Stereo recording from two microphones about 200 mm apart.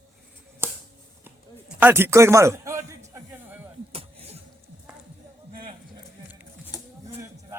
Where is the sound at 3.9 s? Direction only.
30° right (ahead or behind).